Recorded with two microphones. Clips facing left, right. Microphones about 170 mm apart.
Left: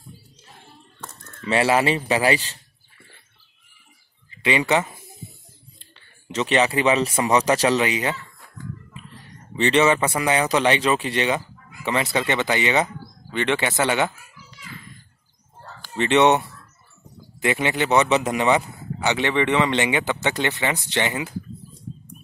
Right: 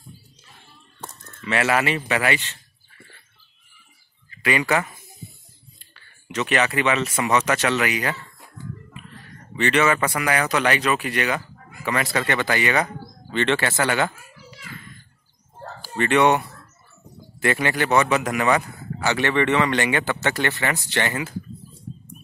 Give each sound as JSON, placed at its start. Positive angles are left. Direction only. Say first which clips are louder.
{"t": 1.4, "sound": "a man's voice", "louder": "left 2 dB", "side_deg": 30}
{"t": 4.4, "sound": "speech", "louder": "left 1 dB", "side_deg": 25}
{"t": 9.6, "sound": "a man's voice", "louder": "left 2 dB", "side_deg": 30}
{"t": 16.0, "sound": "a man's voice", "louder": "left 1 dB", "side_deg": 25}